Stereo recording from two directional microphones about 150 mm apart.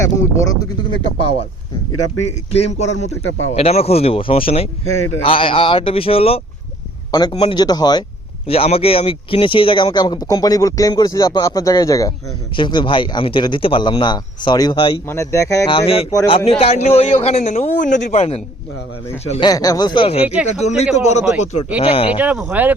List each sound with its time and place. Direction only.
0.0 s speech: 20° left (ahead or behind)
2.6 s a man's voice: 45° left (ahead or behind)
7.1 s a man's voice: 30° left (ahead or behind)
8.4 s speech: 40° left (ahead or behind)
15.0 s speech: 20° left (ahead or behind)
15.7 s a man's voice: 40° left (ahead or behind)
19.4 s speech: 25° left (ahead or behind)
20.2 s speech: 10° right (ahead or behind)
20.6 s a man's voice: 50° left (ahead or behind)
21.8 s speech: 40° left (ahead or behind)
22.2 s speech: 5° right (ahead or behind)